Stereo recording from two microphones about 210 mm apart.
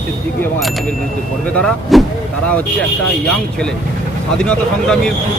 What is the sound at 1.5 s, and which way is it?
Speech, centre (ahead or behind).